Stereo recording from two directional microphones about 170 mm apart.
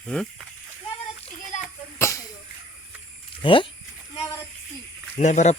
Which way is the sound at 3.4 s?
30° left (ahead or behind).